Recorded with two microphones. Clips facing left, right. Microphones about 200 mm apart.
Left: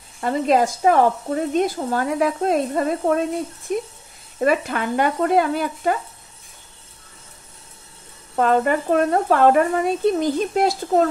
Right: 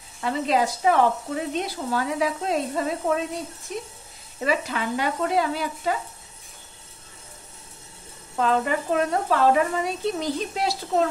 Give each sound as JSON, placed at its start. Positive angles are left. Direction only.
{"t": 0.2, "sound": "speech", "side_deg": 45}
{"t": 8.4, "sound": "speech", "side_deg": 50}